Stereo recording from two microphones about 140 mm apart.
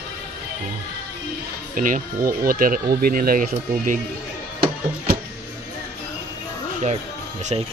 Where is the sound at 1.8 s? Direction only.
75° right (ahead or behind).